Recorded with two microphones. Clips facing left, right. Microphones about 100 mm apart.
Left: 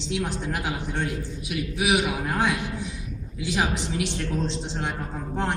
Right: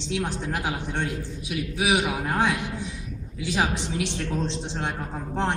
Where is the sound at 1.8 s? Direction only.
25° right (ahead or behind).